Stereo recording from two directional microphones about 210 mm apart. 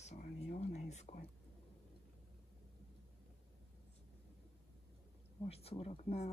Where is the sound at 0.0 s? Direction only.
30° left (ahead or behind).